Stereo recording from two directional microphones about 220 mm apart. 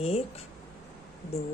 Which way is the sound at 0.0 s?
25° left (ahead or behind).